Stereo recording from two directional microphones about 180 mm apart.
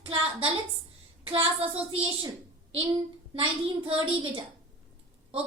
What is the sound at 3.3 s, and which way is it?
Speech, 30° right (ahead or behind).